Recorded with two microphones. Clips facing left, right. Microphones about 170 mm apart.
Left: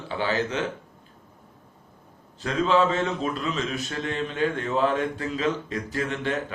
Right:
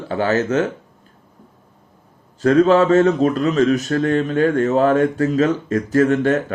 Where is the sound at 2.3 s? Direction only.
45° right (ahead or behind).